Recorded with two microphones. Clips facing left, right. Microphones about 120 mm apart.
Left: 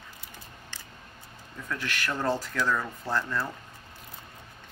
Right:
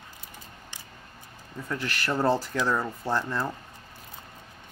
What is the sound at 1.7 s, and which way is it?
Speech, 30° right (ahead or behind).